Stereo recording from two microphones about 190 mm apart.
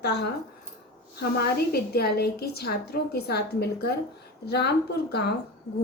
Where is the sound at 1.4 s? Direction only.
55° left (ahead or behind).